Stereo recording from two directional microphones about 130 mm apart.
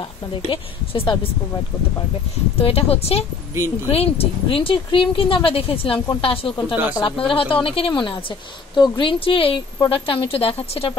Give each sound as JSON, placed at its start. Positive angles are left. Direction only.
{"t": 0.3, "sound": "speech", "side_deg": 45}
{"t": 2.6, "sound": "speech", "side_deg": 50}